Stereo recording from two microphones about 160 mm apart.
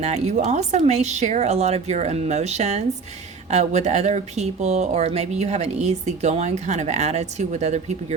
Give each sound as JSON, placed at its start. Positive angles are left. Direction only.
{"t": 0.0, "sound": "speech", "side_deg": -45}